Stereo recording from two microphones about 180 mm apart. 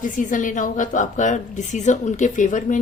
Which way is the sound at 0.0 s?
45° left (ahead or behind).